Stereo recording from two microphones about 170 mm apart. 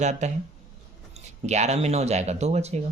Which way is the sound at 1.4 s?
40° right (ahead or behind).